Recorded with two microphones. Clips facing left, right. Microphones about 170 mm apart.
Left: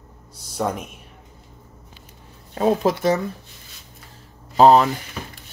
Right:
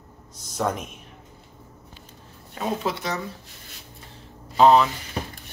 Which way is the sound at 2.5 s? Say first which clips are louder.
Left 8 dB; 40° left (ahead or behind).